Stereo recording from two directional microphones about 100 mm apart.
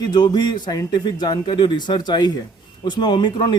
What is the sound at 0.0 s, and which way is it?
A man's voice, 45° left (ahead or behind).